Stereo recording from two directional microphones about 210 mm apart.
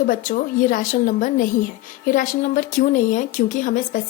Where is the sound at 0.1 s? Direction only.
40° left (ahead or behind).